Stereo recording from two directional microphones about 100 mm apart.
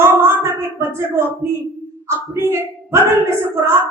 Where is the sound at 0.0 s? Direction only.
25° right (ahead or behind).